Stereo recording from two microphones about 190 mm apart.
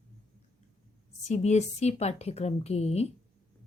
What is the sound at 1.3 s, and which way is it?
A woman's voice, 35° left (ahead or behind).